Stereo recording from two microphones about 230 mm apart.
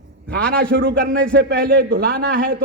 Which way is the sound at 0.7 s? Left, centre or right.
Right.